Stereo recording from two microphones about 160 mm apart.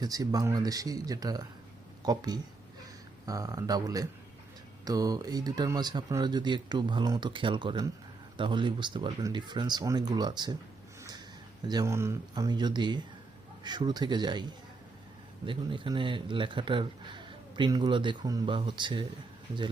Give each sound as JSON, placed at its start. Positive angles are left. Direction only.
{"t": 0.0, "sound": "speech", "side_deg": -25}
{"t": 11.7, "sound": "speech", "side_deg": -20}
{"t": 15.4, "sound": "speech", "side_deg": -30}